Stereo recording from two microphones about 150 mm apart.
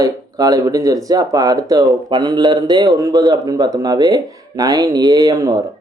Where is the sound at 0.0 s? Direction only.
25° right (ahead or behind).